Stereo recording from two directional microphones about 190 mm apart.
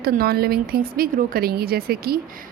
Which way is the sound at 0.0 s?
55° right (ahead or behind).